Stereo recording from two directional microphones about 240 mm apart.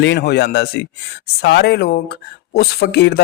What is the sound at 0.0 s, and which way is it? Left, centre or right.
Speech, left.